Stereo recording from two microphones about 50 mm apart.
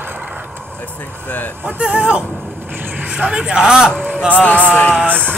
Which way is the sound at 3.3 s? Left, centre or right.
Centre.